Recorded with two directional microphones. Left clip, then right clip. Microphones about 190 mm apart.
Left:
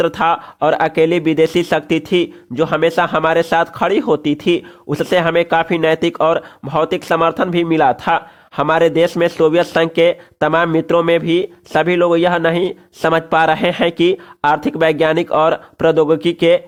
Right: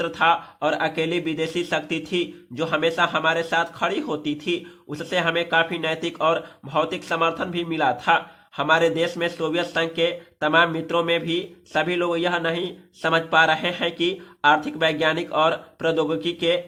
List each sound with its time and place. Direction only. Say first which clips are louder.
0.0 s speech: left 5 dB; 50° left (ahead or behind)